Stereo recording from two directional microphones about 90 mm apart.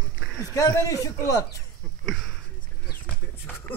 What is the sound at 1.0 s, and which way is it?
Speech, 40° left (ahead or behind).